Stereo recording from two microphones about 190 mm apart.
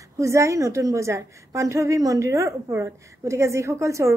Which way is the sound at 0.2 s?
15° right (ahead or behind).